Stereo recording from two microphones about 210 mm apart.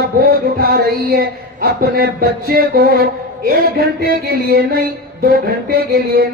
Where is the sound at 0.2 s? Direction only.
45° right (ahead or behind).